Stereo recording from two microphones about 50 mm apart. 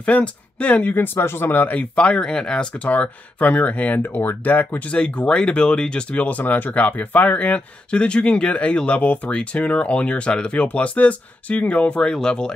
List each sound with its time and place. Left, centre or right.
0.0 s speech: left
0.9 s speech: left
1.7 s speech: left
2.9 s speech: left
4.9 s speech: left
6.2 s speech: left
7.3 s speech: left